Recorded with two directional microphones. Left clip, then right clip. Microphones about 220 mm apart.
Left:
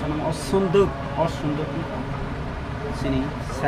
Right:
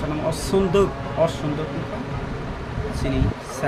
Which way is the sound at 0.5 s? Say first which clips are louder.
Even; 15° right (ahead or behind).